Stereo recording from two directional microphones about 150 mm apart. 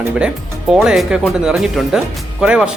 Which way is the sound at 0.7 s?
Centre (ahead or behind).